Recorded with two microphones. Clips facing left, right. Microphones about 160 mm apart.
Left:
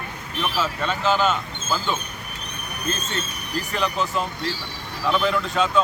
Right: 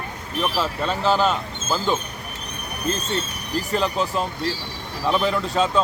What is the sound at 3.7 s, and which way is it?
Speech, 35° right (ahead or behind).